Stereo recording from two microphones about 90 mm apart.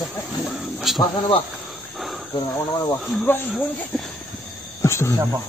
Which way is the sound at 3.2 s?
25° left (ahead or behind).